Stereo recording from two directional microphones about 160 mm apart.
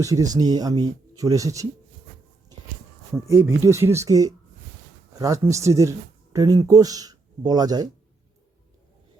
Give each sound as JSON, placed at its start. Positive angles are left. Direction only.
{"t": 0.0, "sound": "speech", "side_deg": -20}
{"t": 3.2, "sound": "speech", "side_deg": -20}